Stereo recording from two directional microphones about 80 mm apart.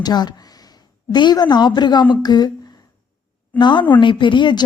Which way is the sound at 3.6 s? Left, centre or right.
Left.